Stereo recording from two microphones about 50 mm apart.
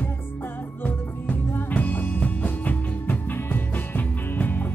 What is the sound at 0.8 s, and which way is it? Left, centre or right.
Music, left.